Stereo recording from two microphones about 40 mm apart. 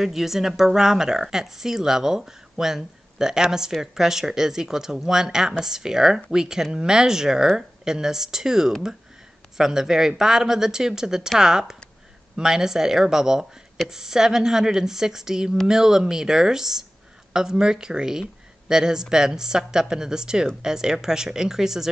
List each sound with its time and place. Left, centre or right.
0.0 s speech: centre